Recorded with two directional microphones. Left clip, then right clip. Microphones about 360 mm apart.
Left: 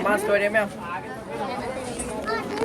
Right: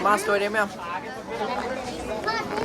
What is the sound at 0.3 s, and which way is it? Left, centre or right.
Speech, centre.